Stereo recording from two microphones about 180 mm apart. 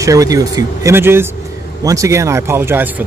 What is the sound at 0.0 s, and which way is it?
Speech, 20° right (ahead or behind).